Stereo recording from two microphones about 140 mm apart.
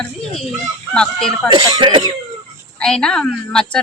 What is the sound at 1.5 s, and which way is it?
Speech, 35° right (ahead or behind).